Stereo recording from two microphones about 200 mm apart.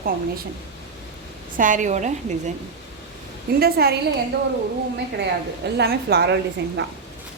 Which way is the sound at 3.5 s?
50° right (ahead or behind).